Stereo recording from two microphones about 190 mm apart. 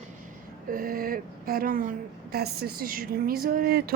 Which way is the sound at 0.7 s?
50° right (ahead or behind).